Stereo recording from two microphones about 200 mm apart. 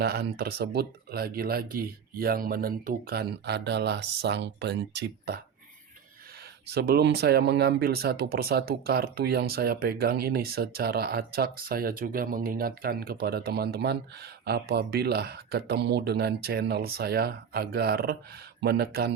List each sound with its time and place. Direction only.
0.0 s speech: 50° right (ahead or behind)
6.7 s speech: 50° right (ahead or behind)